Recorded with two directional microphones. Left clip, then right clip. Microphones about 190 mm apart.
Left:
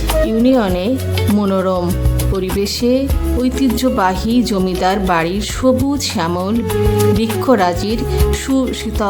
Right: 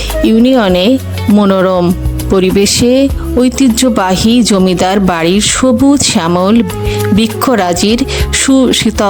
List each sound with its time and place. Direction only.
0.3 s speech: 45° right (ahead or behind)